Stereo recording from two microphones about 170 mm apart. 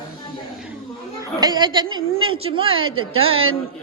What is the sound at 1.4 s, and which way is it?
A woman's voice, 25° right (ahead or behind).